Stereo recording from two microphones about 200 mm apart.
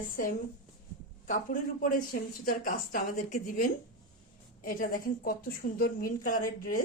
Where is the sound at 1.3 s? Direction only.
45° left (ahead or behind).